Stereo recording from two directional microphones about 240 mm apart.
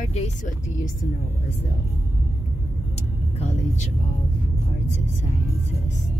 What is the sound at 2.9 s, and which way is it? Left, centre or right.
Vehicle, left.